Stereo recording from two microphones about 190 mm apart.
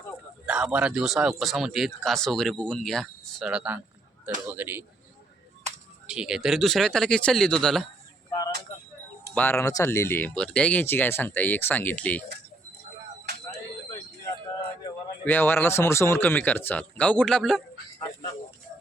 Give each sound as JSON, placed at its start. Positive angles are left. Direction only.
{"t": 0.4, "sound": "a man's voice", "side_deg": -5}
{"t": 6.1, "sound": "a man's voice", "side_deg": -5}
{"t": 8.3, "sound": "a sound", "side_deg": 20}
{"t": 9.3, "sound": "speech", "side_deg": 10}
{"t": 15.2, "sound": "speech", "side_deg": 10}